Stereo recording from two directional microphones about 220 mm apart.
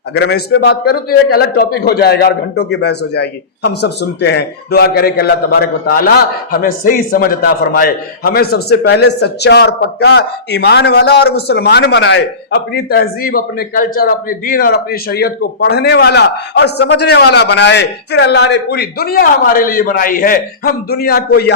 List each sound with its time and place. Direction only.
0.2 s a man's voice: 50° left (ahead or behind)